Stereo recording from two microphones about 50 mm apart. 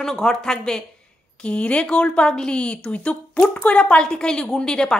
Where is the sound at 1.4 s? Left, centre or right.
Left.